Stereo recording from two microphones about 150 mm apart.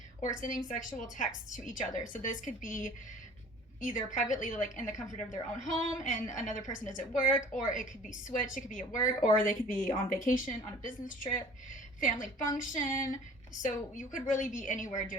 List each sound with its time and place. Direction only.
0.2 s a woman's voice: 60° left (ahead or behind)